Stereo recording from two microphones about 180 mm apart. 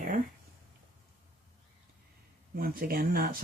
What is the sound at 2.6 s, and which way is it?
Speech, 55° right (ahead or behind).